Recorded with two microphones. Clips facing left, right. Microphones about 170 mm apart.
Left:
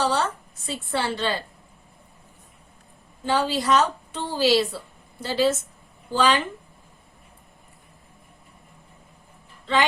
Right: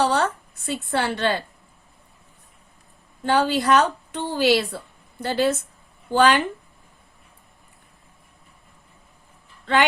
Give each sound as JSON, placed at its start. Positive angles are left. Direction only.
{"t": 0.0, "sound": "a sound", "side_deg": -60}
{"t": 0.9, "sound": "a woman's voice", "side_deg": -60}
{"t": 3.2, "sound": "a woman's voice", "side_deg": -60}